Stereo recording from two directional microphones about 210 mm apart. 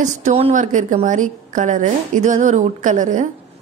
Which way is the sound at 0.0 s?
35° right (ahead or behind).